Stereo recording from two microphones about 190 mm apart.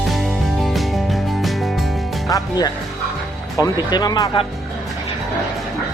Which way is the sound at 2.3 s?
20° left (ahead or behind).